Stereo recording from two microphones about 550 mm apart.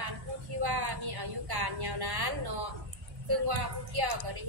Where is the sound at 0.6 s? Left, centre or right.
Right.